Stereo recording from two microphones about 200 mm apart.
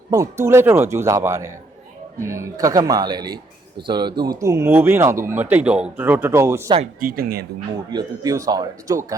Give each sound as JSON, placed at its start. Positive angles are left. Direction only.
{"t": 0.1, "sound": "speech", "side_deg": -15}
{"t": 7.0, "sound": "speech", "side_deg": -45}
{"t": 7.9, "sound": "speech", "side_deg": -20}